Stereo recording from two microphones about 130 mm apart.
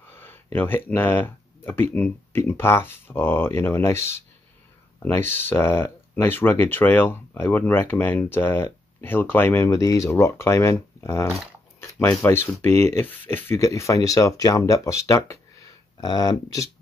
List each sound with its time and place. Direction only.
0.1 s speech: 15° left (ahead or behind)